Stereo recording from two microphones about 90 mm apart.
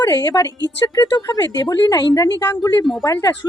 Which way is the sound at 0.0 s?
45° left (ahead or behind).